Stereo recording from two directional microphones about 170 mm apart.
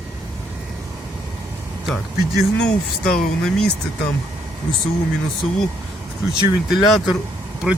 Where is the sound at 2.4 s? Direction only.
5° left (ahead or behind).